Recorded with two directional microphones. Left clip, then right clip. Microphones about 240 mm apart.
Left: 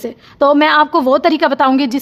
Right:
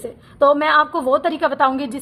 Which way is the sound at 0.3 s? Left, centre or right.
Left.